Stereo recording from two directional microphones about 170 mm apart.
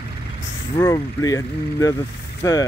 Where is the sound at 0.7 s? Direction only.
20° left (ahead or behind).